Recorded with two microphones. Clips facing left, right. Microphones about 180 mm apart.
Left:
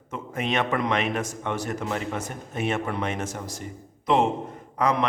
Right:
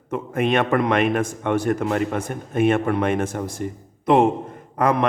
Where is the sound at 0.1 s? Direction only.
55° right (ahead or behind).